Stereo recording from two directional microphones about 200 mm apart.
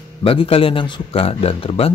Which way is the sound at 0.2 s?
25° left (ahead or behind).